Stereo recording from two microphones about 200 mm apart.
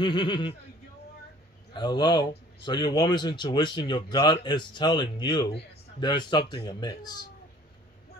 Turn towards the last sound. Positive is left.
turn(degrees=20)  # may be behind; listen again after turning